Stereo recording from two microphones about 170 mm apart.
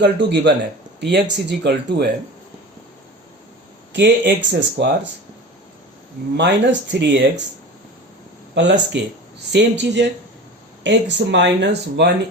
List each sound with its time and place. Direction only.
0.0 s speech: 90° right
3.9 s speech: 90° right
6.3 s speech: 90° right
8.5 s speech: 90° right